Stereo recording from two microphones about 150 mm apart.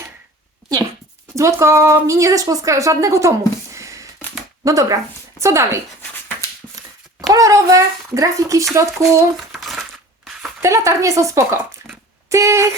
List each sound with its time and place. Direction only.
1.4 s a woman's voice: 20° right (ahead or behind)
7.2 s speech: 25° right (ahead or behind)
9.5 s crumpling: centre (ahead or behind)
10.6 s a woman's voice: 20° right (ahead or behind)